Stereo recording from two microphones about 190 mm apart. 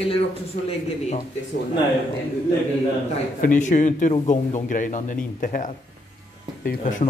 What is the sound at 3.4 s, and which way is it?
A man's voice, 45° left (ahead or behind).